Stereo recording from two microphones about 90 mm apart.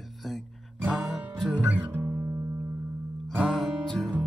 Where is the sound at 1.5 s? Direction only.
20° right (ahead or behind).